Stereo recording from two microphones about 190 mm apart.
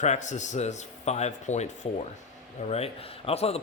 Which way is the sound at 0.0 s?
40° left (ahead or behind).